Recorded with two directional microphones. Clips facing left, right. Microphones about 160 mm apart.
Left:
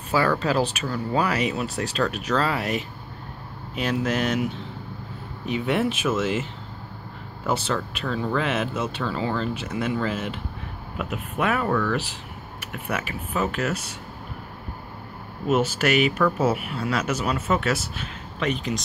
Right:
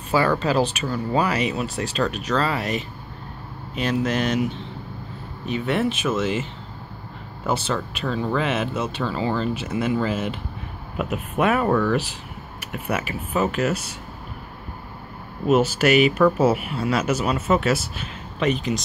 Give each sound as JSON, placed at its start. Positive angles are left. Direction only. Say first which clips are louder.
{"t": 0.1, "sound": "speech", "louder": "right 2 dB", "side_deg": 0}
{"t": 5.5, "sound": "speech", "louder": "right 1 dB", "side_deg": 10}
{"t": 7.4, "sound": "speech", "louder": "right 1 dB", "side_deg": 0}
{"t": 11.0, "sound": "speech", "louder": "right 4 dB", "side_deg": -20}
{"t": 12.5, "sound": "speech", "louder": "right 3 dB", "side_deg": -10}
{"t": 15.4, "sound": "speech", "louder": "right 4 dB", "side_deg": -5}